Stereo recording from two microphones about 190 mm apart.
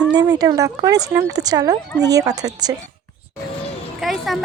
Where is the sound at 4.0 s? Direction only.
Centre (ahead or behind).